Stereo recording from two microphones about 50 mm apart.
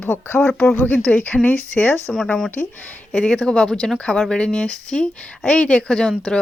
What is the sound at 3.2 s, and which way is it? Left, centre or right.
Speech, centre.